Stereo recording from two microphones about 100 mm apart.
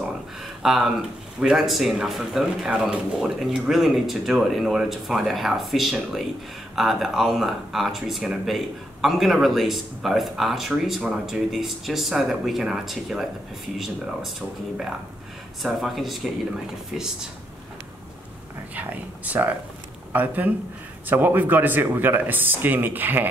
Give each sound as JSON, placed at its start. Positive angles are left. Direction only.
{"t": 0.6, "sound": "speech", "side_deg": -5}
{"t": 15.6, "sound": "speech", "side_deg": 0}
{"t": 18.8, "sound": "speech", "side_deg": -15}